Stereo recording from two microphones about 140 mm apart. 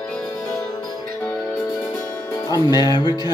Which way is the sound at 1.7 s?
25° left (ahead or behind).